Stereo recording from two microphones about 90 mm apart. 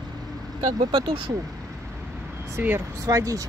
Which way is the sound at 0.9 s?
80° right.